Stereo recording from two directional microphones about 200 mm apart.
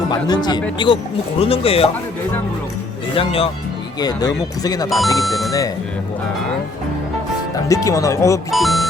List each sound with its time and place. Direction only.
0.1 s speech: 20° left (ahead or behind)
3.2 s speech: 30° left (ahead or behind)
4.9 s speech: centre (ahead or behind)
5.5 s speech: 15° left (ahead or behind)
7.5 s speech: 15° left (ahead or behind)
8.4 s speech: centre (ahead or behind)